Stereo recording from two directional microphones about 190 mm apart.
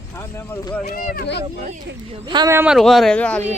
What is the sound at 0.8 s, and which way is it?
Speech, 50° left (ahead or behind).